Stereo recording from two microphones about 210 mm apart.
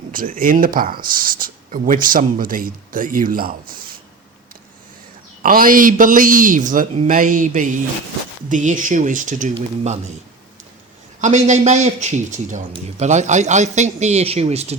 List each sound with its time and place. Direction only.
0.1 s speech: 40° right (ahead or behind)
5.4 s speech: 40° right (ahead or behind)
11.2 s speech: 35° right (ahead or behind)